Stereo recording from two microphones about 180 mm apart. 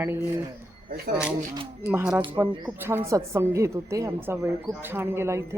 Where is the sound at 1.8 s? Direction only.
10° right (ahead or behind).